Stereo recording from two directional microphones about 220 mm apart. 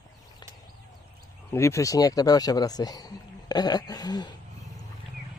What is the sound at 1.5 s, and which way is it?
Speech, 15° left (ahead or behind).